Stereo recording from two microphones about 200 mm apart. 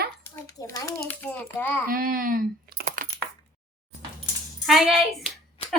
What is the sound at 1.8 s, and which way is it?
Speech, 45° right (ahead or behind).